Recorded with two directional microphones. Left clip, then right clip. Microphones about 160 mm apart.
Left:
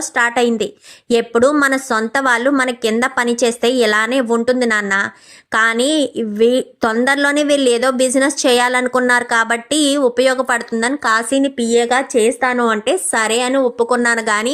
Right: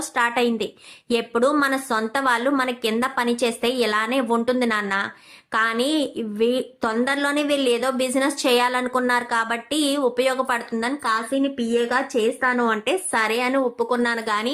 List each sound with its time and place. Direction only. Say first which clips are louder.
0.1 s a woman's voice: left 6 dB; 35° left (ahead or behind)
11.9 s a woman's voice: left 7 dB; 30° left (ahead or behind)